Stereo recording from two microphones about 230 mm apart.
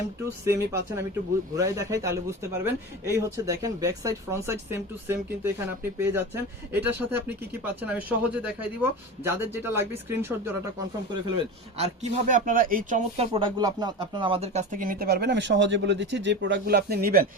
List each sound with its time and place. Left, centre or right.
0.4 s speech: centre
11.8 s speech: right
13.1 s speech: right